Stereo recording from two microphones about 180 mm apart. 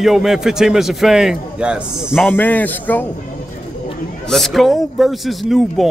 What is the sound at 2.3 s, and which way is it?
Speech, 10° left (ahead or behind).